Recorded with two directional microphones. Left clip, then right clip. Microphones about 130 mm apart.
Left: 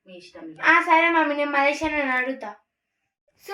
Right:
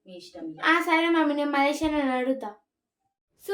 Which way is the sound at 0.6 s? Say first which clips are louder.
Left 5 dB; 10° right (ahead or behind).